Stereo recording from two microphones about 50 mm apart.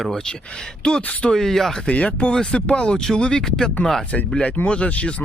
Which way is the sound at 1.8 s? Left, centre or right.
Left.